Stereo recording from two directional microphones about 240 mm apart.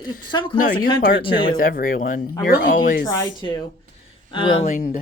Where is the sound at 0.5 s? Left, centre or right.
Left.